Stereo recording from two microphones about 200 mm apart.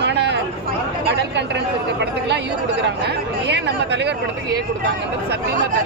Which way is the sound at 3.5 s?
60° right (ahead or behind).